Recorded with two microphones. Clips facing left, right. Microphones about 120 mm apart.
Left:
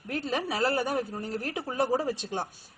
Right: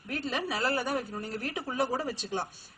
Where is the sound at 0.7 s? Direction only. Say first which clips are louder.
Left 2 dB; 20° left (ahead or behind).